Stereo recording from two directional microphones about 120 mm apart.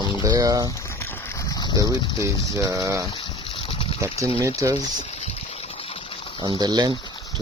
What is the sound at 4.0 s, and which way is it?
Speech, 25° right (ahead or behind).